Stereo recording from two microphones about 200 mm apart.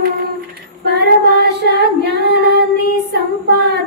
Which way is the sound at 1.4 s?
55° right (ahead or behind).